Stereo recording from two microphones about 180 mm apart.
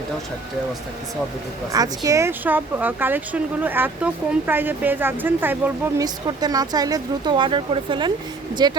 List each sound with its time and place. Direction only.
1.7 s speech: 20° right (ahead or behind)
6.2 s speech: 20° right (ahead or behind)